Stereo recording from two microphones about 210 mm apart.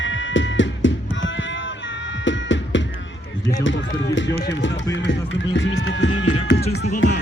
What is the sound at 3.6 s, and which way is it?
Run, 60° left (ahead or behind).